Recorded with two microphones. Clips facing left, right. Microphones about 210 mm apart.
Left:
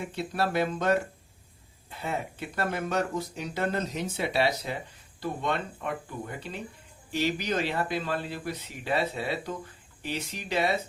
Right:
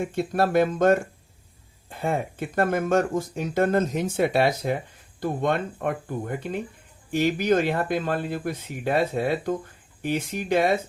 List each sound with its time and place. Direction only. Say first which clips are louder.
0.0 s speech: right 6 dB; 50° right (ahead or behind)